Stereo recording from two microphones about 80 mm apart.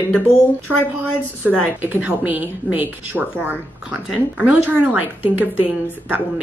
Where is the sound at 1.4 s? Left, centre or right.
Right.